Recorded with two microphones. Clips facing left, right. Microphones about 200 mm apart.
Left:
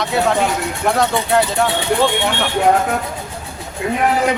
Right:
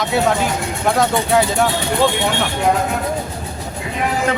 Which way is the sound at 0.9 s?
Centre (ahead or behind).